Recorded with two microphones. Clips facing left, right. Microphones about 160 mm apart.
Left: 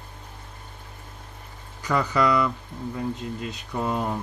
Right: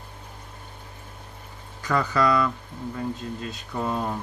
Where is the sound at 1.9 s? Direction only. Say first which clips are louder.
Even; 15° left (ahead or behind).